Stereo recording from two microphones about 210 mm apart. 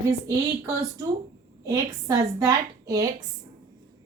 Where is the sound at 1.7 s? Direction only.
15° right (ahead or behind).